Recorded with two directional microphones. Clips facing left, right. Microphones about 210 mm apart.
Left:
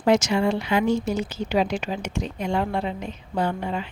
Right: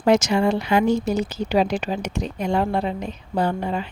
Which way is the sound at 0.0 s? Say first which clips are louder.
Right 2 dB; 40° right (ahead or behind).